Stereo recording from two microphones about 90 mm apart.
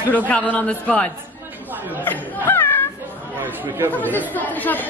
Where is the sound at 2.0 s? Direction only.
20° left (ahead or behind).